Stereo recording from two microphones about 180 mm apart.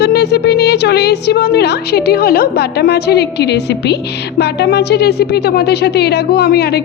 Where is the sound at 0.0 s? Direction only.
65° left (ahead or behind).